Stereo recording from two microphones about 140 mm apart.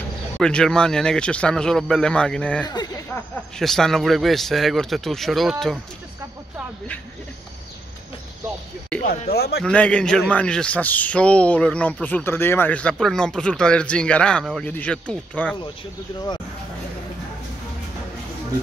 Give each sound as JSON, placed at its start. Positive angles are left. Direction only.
{"t": 0.4, "sound": "a man's voice", "side_deg": 5}
{"t": 2.6, "sound": "speech", "side_deg": 30}
{"t": 3.5, "sound": "a man's voice", "side_deg": 5}
{"t": 8.9, "sound": "a man's voice", "side_deg": 10}